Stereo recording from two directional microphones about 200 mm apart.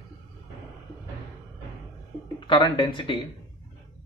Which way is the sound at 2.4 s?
25° left (ahead or behind).